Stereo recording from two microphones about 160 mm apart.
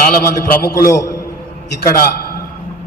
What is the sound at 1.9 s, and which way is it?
Speech, 70° left (ahead or behind).